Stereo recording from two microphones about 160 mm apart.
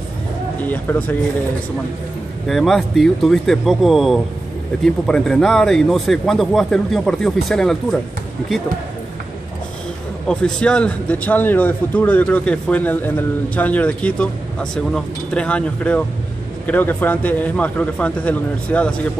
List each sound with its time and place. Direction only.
0.6 s speech: 10° left (ahead or behind)
2.4 s a man's voice: centre (ahead or behind)
10.2 s a man's voice: 5° left (ahead or behind)